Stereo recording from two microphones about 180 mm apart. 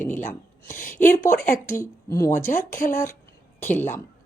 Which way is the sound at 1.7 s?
15° left (ahead or behind).